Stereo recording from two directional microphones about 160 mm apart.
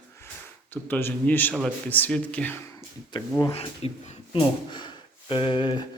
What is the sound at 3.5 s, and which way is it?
Speech, 40° left (ahead or behind).